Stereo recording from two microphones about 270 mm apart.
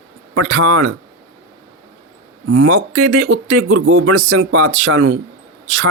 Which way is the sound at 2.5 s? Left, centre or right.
Right.